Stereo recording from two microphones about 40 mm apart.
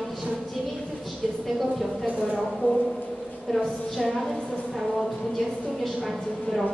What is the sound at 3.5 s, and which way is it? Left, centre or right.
A woman's voice, centre.